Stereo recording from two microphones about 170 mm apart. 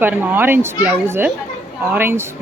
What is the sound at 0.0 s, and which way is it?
Speech, 10° right (ahead or behind).